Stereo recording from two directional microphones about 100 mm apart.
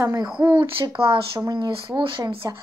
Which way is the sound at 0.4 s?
55° right (ahead or behind).